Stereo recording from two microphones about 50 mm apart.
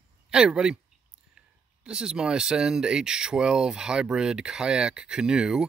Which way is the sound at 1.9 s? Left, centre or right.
Centre.